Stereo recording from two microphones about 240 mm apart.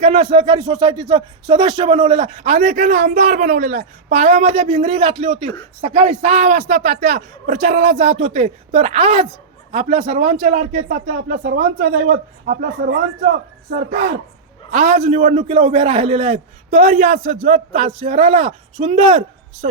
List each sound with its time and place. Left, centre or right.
0.0 s speech: right
13.7 s speech: right